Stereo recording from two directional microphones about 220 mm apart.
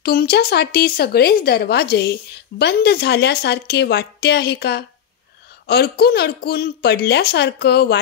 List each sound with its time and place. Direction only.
0.0 s a woman's voice: 45° left (ahead or behind)